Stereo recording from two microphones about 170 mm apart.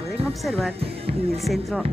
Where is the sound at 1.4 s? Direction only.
Centre (ahead or behind).